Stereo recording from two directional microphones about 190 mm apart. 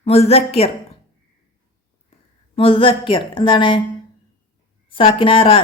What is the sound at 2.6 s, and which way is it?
A woman's voice, 30° left (ahead or behind).